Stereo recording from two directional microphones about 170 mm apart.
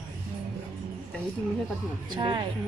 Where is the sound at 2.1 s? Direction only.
25° right (ahead or behind).